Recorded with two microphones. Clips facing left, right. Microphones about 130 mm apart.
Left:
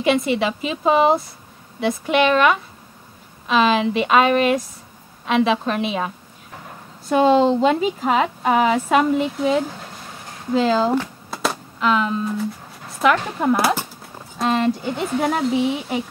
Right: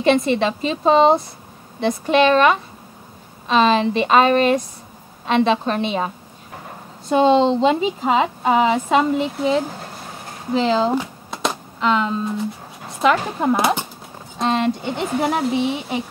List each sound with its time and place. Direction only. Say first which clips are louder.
0.0 s a woman's voice: right 2 dB; 5° left (ahead or behind)
7.1 s a woman's voice: right 1 dB; 25° right (ahead or behind)
7.3 s a woman's voice: even; 5° left (ahead or behind)
7.7 s a woman's voice: right 1 dB; 20° right (ahead or behind)
9.0 s a woman's voice: even; 5° right (ahead or behind)
11.2 s a sound: even; 5° left (ahead or behind)
12.4 s a sound: even; 25° right (ahead or behind)
13.1 s speech: even; 10° right (ahead or behind)
14.4 s a woman's voice: even; centre (ahead or behind)